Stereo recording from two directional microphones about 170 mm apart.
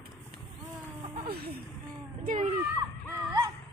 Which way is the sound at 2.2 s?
50° right (ahead or behind).